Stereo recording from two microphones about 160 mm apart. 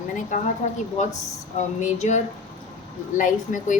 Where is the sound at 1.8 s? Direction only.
45° left (ahead or behind).